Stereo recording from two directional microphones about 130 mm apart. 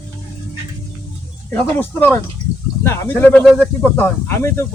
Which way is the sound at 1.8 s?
15° left (ahead or behind).